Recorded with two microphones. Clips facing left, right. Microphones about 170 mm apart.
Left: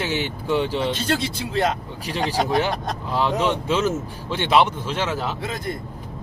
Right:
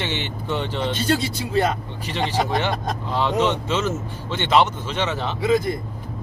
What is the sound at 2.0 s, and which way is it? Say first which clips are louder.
A man's voice: even; 10° left (ahead or behind).